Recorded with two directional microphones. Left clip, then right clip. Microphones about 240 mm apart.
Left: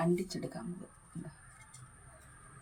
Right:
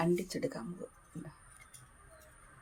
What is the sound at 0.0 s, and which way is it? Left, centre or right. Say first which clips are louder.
Speech: right 1 dB; right.